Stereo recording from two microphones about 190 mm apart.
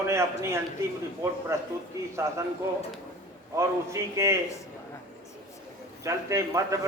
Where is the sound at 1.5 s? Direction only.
15° right (ahead or behind).